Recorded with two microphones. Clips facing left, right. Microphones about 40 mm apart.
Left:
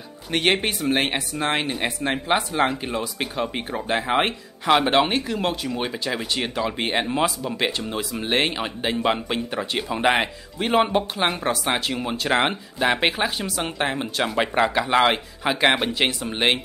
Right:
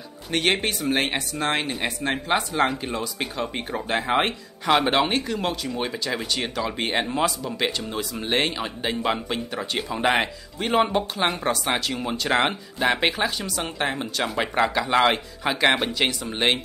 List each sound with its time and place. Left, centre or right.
0.3 s speech: centre
15.9 s speech: centre